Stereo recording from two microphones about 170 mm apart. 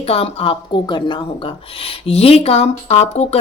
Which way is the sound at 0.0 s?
35° left (ahead or behind).